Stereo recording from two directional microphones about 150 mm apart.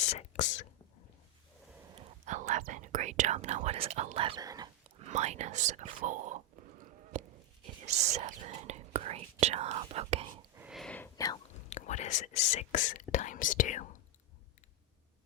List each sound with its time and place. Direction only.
0.0 s speech: 50° left (ahead or behind)
2.2 s speech: 50° right (ahead or behind); by 4.4 s 35° right (ahead or behind)
4.4 s speech: 25° right (ahead or behind)
4.9 s whispering: 50° right (ahead or behind)
7.9 s speech: 50° right (ahead or behind)
10.6 s a sound: 5° right (ahead or behind)
10.8 s whispering: 10° left (ahead or behind)
11.7 s speech: 50° left (ahead or behind)